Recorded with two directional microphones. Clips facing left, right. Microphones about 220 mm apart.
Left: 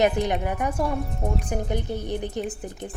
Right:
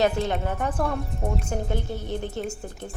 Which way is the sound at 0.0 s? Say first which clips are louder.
Left 1 dB; 15° left (ahead or behind).